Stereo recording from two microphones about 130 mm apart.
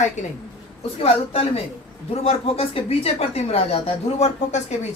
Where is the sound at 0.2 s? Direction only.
70° left (ahead or behind).